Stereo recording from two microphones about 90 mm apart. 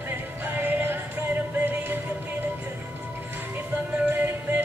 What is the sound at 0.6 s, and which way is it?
Music, 20° right (ahead or behind).